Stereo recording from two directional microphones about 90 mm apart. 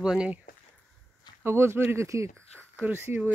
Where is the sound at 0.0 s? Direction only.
10° right (ahead or behind).